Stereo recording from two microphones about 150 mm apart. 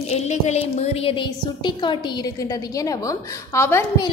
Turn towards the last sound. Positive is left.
turn(degrees=15)  # may be behind; listen again after turning